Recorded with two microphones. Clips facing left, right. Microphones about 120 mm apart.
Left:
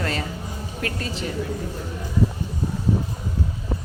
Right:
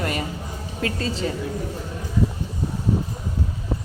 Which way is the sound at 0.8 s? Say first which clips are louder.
Right 4 dB; 25° right (ahead or behind).